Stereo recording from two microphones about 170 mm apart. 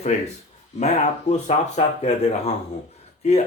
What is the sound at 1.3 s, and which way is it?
Speech, 40° left (ahead or behind).